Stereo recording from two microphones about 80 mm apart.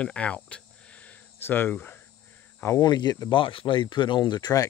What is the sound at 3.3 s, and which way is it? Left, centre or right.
Speech, left.